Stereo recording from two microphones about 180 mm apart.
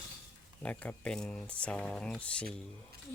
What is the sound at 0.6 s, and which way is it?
Speech, 5° left (ahead or behind).